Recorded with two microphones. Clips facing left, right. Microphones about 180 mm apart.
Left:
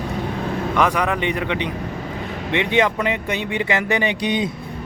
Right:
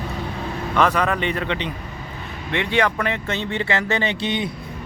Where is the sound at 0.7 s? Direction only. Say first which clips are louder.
Right 1 dB; 15° left (ahead or behind).